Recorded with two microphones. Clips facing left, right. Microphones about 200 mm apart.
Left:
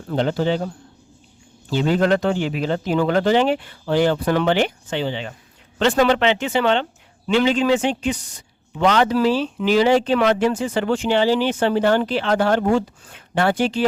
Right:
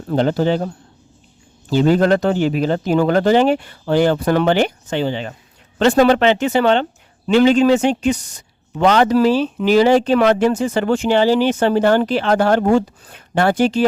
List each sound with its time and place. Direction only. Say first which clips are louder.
0.1 s a man's voice: right 4 dB; 45° right (ahead or behind)
1.7 s a man's voice: right 4 dB; 45° right (ahead or behind)